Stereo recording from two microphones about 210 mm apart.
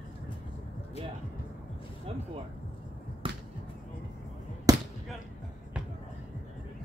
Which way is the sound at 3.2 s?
25° right (ahead or behind).